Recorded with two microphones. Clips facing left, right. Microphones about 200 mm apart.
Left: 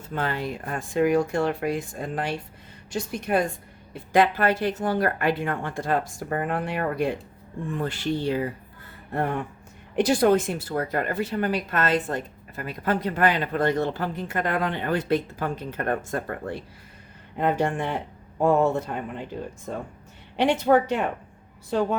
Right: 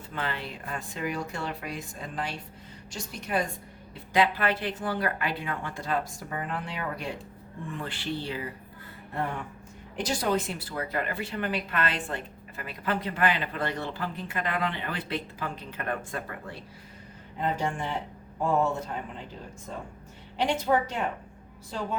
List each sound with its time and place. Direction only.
0.1 s a woman's voice: 45° left (ahead or behind)
7.8 s a woman's voice: 45° left (ahead or behind)
9.9 s a woman's voice: 60° left (ahead or behind)